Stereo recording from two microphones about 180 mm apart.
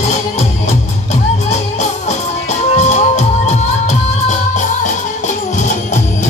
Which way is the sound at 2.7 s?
40° left (ahead or behind).